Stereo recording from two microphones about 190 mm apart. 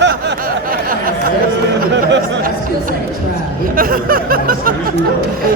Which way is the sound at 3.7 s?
50° right (ahead or behind).